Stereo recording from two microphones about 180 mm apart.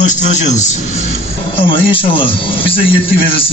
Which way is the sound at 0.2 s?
40° left (ahead or behind).